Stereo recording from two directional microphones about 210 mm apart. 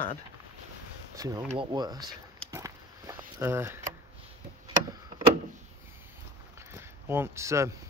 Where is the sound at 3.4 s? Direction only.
10° right (ahead or behind).